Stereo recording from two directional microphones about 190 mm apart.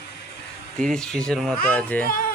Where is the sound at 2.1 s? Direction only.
50° left (ahead or behind).